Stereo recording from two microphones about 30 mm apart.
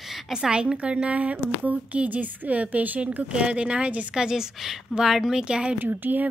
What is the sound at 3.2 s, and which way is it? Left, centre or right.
Speech, right.